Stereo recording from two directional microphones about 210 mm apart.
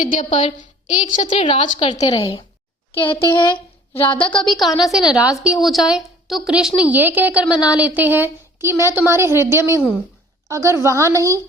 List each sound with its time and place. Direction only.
0.0 s a woman's voice: 30° left (ahead or behind)
4.6 s a woman's voice: centre (ahead or behind)